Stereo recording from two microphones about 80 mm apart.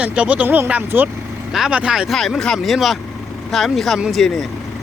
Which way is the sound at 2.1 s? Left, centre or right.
Centre.